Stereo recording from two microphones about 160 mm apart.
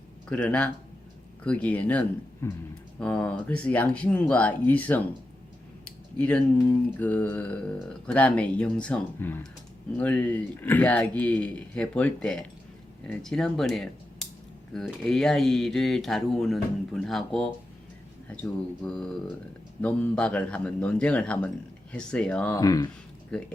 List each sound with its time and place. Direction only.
0.3 s speech: 5° left (ahead or behind)
18.8 s speech: 5° left (ahead or behind)
22.5 s speech: 20° left (ahead or behind)
23.3 s speech: 5° left (ahead or behind)